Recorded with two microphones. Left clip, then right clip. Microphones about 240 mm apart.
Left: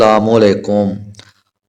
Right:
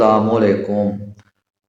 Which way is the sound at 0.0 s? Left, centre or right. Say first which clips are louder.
Left 4 dB; left.